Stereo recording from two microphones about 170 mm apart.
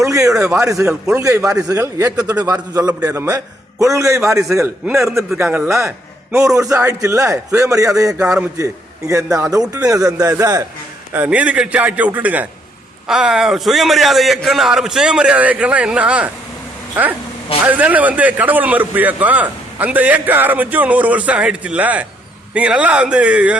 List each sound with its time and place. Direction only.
0.0 s a man's voice: 20° right (ahead or behind)
11.1 s a man's voice: 10° right (ahead or behind)